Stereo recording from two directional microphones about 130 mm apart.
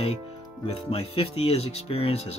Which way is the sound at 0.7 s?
50° left (ahead or behind).